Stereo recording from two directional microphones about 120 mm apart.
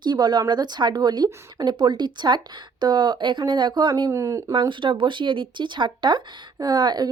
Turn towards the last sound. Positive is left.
turn(degrees=-35)  # may be behind; listen again after turning